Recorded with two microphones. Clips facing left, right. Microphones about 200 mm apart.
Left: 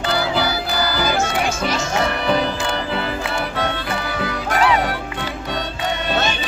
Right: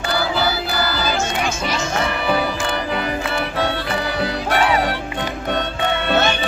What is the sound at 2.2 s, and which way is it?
Music, 5° right (ahead or behind).